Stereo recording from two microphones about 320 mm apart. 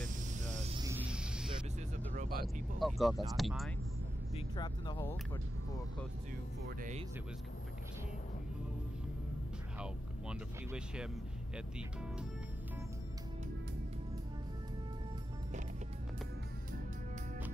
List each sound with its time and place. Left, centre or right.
0.0 s vehicle: right
0.8 s music: centre
2.1 s music: right
2.4 s speech: centre
4.4 s speech: centre
6.8 s speech: right
9.8 s speech: centre